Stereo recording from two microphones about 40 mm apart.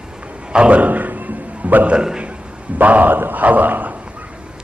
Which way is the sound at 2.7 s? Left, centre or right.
Right.